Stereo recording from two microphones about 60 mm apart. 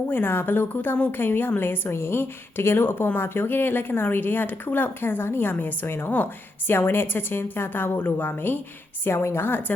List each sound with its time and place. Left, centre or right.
0.1 s speech: left
9.0 s speech: left